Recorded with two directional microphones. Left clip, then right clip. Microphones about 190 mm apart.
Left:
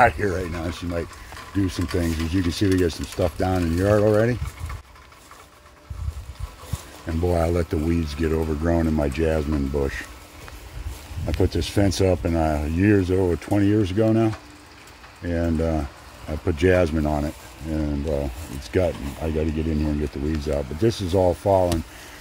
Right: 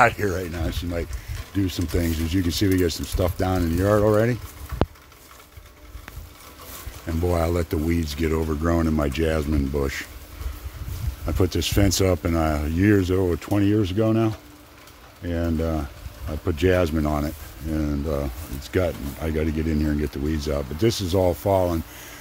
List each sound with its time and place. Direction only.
0.0 s speech: 5° right (ahead or behind)
7.1 s speech: 5° right (ahead or behind)
11.2 s speech: 10° right (ahead or behind)
18.6 s speech: 5° left (ahead or behind)
21.2 s speech: 20° right (ahead or behind)